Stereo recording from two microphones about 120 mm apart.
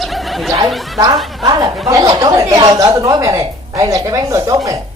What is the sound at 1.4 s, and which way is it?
Speech, 35° right (ahead or behind).